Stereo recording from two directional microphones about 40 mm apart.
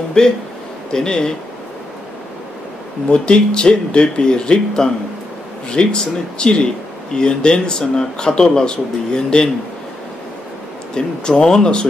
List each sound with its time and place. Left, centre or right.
0.2 s speech: centre
3.1 s speech: left
11.0 s speech: centre